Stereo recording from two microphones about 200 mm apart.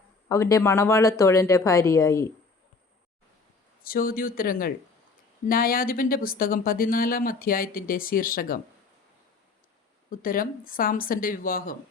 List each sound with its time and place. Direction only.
0.3 s speech: 15° left (ahead or behind)
3.8 s speech: 45° left (ahead or behind)
10.1 s speech: 45° left (ahead or behind)